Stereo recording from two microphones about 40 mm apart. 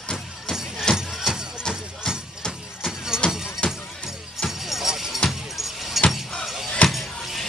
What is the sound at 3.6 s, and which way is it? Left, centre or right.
Music, left.